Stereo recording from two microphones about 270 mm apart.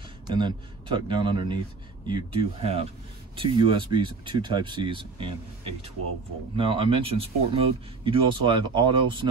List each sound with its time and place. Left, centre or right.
0.3 s speech: centre
6.5 s speech: centre